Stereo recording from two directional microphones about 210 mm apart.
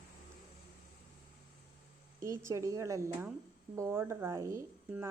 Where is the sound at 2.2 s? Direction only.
15° right (ahead or behind).